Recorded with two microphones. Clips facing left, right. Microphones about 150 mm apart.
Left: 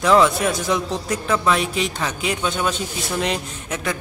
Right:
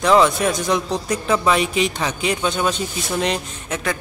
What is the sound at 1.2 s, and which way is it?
Speech, 15° right (ahead or behind).